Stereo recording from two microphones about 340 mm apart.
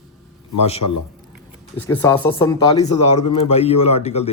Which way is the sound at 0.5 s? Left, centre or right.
Centre.